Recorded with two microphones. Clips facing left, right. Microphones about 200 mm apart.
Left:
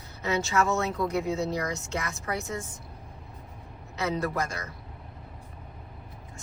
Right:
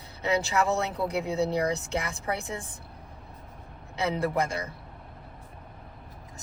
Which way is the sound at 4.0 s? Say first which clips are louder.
Right 2 dB; 30° right (ahead or behind).